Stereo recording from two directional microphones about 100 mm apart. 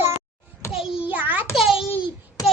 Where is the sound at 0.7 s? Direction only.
5° right (ahead or behind).